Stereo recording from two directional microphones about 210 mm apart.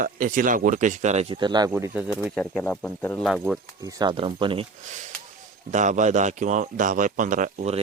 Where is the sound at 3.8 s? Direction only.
20° right (ahead or behind).